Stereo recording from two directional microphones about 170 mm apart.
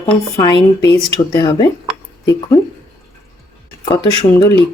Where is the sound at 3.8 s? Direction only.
25° left (ahead or behind).